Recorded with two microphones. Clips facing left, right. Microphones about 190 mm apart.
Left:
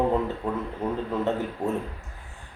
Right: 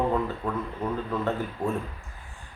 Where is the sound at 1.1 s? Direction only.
20° left (ahead or behind).